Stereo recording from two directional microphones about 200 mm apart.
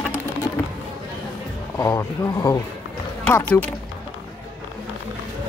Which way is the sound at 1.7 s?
15° left (ahead or behind).